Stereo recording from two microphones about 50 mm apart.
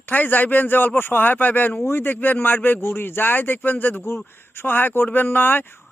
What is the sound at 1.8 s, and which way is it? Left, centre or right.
Speech, left.